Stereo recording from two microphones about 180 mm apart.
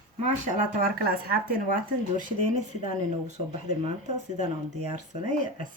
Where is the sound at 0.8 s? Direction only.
55° right (ahead or behind).